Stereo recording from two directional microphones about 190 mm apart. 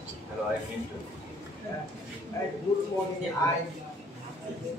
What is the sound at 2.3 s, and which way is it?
Speech, 15° left (ahead or behind).